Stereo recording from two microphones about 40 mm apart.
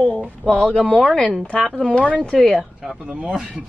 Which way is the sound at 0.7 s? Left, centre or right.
Left.